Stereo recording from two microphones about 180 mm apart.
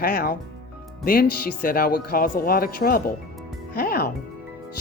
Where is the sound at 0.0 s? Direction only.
55° left (ahead or behind).